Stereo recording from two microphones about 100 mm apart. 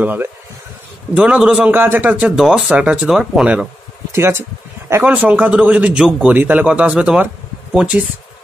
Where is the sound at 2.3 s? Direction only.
5° right (ahead or behind).